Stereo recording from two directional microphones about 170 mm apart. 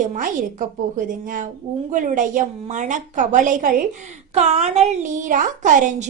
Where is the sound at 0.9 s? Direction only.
50° right (ahead or behind).